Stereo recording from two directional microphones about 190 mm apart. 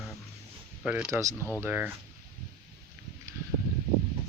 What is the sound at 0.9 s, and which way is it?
Speech, 10° right (ahead or behind).